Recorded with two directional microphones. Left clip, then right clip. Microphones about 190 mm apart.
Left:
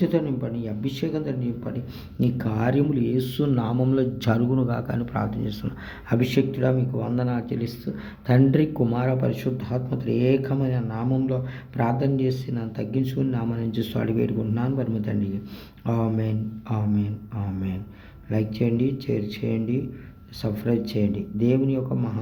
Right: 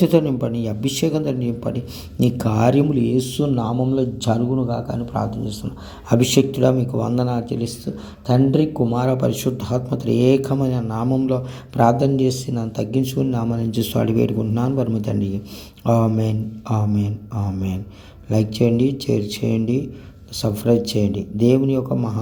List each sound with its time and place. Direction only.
0.0 s speech: 35° right (ahead or behind); by 5.3 s 10° right (ahead or behind)
6.1 s speech: 25° right (ahead or behind)
8.3 s speech: 10° right (ahead or behind)
9.0 s speech: 25° right (ahead or behind)